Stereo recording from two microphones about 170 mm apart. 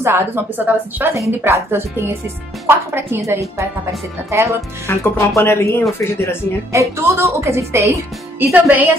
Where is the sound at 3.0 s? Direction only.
15° right (ahead or behind).